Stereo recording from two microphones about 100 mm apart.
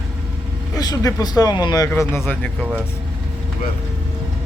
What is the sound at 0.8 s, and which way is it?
Speech, 35° left (ahead or behind).